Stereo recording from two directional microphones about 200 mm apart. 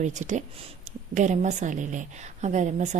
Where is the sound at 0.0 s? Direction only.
35° right (ahead or behind).